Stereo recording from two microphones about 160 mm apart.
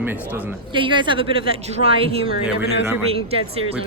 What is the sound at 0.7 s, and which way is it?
Speech, 30° right (ahead or behind).